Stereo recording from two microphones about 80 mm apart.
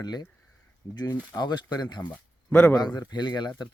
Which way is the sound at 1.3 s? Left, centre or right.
Left.